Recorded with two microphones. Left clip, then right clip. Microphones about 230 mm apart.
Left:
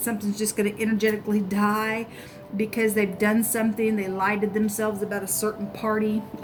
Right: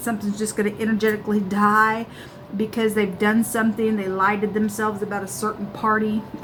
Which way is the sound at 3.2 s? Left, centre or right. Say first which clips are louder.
Right 3 dB; left.